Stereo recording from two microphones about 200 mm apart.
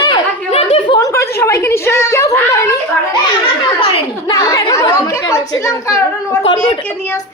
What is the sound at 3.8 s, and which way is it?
A woman's voice, 25° left (ahead or behind).